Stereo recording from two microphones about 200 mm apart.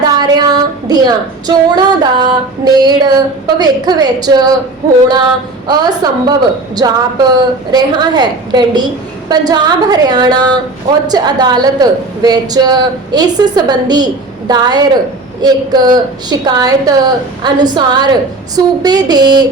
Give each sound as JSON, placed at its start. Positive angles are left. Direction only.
{"t": 0.0, "sound": "female singing", "side_deg": -20}
{"t": 5.6, "sound": "a woman's voice", "side_deg": -20}